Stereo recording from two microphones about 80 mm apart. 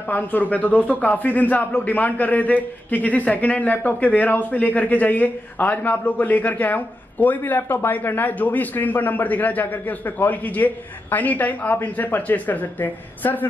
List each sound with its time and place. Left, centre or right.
0.1 s a man's voice: left